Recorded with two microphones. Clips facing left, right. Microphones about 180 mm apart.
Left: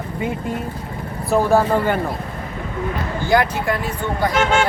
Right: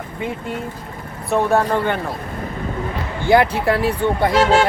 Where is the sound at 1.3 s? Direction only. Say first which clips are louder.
Left 1 dB; centre (ahead or behind).